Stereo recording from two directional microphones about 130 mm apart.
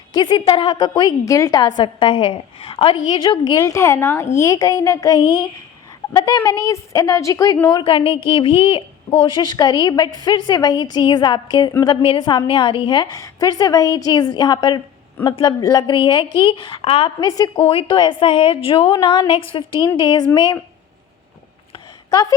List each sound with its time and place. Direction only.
0.1 s a woman's voice: 35° left (ahead or behind)
7.7 s a woman's voice: 35° left (ahead or behind)
17.2 s a woman's voice: 30° left (ahead or behind)
17.6 s a woman's voice: 45° left (ahead or behind)
22.1 s a woman's voice: 25° left (ahead or behind)